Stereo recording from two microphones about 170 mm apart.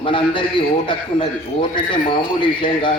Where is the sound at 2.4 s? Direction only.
30° left (ahead or behind).